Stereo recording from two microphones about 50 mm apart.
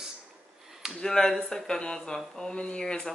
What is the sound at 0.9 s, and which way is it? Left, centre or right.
Speech, centre.